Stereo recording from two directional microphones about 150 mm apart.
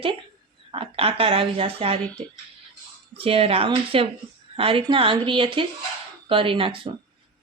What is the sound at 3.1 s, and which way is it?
Speech, 40° right (ahead or behind).